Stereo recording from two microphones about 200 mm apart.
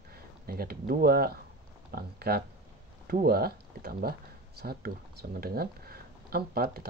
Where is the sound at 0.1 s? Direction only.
50° right (ahead or behind).